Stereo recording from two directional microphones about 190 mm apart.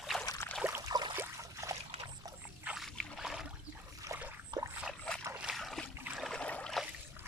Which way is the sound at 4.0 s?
15° right (ahead or behind).